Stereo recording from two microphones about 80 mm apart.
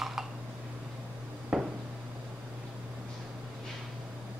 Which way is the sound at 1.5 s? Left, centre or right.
Centre.